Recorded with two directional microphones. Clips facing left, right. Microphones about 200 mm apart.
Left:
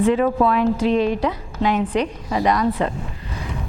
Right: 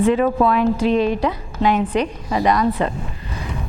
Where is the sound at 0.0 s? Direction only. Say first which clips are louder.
Right 1 dB; 15° right (ahead or behind).